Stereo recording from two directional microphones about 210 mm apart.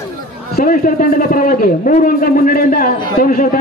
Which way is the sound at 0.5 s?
40° left (ahead or behind).